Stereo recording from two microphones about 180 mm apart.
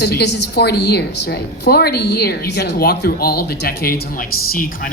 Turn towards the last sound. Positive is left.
turn(degrees=50)  # may be behind; listen again after turning